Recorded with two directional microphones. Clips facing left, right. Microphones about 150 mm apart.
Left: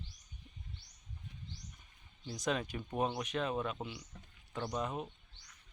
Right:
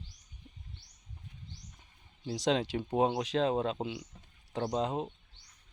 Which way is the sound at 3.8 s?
25° right (ahead or behind).